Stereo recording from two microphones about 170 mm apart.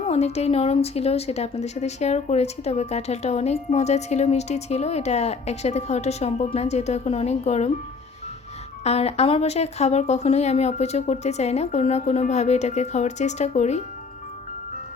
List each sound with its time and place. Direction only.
0.1 s a woman's voice: 40° left (ahead or behind)
8.8 s a woman's voice: 40° left (ahead or behind)